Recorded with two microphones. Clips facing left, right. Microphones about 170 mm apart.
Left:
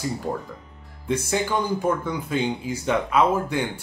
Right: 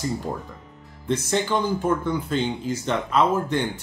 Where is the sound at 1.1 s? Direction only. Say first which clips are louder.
Right 1 dB; 10° left (ahead or behind).